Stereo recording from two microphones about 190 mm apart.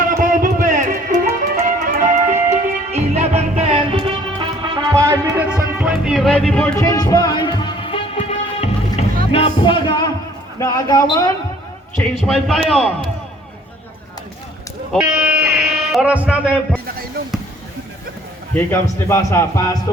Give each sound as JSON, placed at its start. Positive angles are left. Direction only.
{"t": 0.2, "sound": "music", "side_deg": -45}
{"t": 4.4, "sound": "music", "side_deg": -25}
{"t": 4.9, "sound": "music", "side_deg": -15}
{"t": 6.7, "sound": "music", "side_deg": 20}
{"t": 10.6, "sound": "a man's voice", "side_deg": 20}
{"t": 12.2, "sound": "a man's voice", "side_deg": 0}
{"t": 14.9, "sound": "music", "side_deg": -5}
{"t": 18.5, "sound": "a man's voice", "side_deg": 15}